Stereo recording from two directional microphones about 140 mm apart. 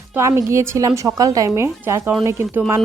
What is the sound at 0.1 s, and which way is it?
A woman's voice, 20° right (ahead or behind).